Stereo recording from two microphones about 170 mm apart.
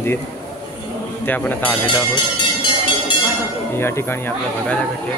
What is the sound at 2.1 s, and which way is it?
Music, 30° left (ahead or behind).